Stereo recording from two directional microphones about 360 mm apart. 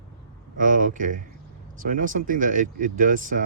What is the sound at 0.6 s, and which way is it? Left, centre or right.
Speech, right.